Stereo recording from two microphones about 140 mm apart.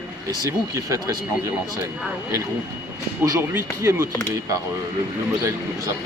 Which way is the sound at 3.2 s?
20° right (ahead or behind).